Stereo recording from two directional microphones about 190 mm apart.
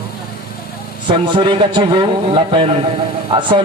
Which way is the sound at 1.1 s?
25° right (ahead or behind).